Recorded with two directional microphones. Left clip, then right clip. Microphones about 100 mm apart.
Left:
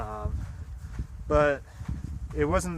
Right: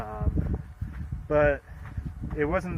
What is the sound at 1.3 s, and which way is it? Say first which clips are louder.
Speech: right 1 dB; 45° left (ahead or behind).